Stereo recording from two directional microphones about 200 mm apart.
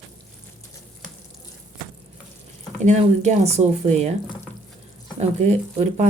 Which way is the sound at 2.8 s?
35° right (ahead or behind).